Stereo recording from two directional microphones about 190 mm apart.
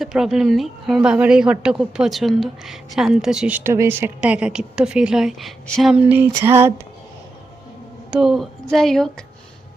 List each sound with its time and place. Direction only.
0.0 s a woman's voice: centre (ahead or behind)
8.1 s a woman's voice: centre (ahead or behind)